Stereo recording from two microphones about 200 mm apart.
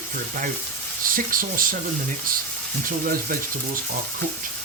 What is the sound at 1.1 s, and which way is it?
Speech, 45° right (ahead or behind).